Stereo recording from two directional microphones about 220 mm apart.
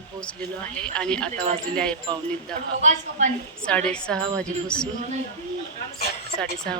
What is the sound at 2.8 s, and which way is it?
Speech, 30° right (ahead or behind).